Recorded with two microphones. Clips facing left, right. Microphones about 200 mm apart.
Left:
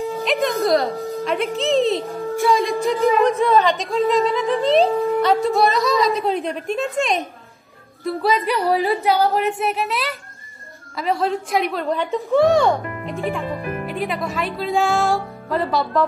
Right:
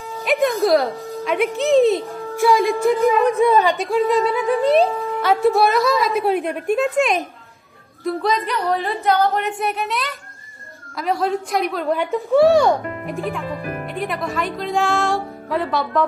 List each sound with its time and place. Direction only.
0.2 s music: centre (ahead or behind)
1.2 s a woman's voice: centre (ahead or behind)
2.1 s music: 15° left (ahead or behind)
2.4 s a woman's voice: centre (ahead or behind)
3.2 s a sound: 10° right (ahead or behind)
5.2 s a woman's voice: centre (ahead or behind)
6.3 s a sound: 15° right (ahead or behind)
6.8 s a woman's voice: centre (ahead or behind)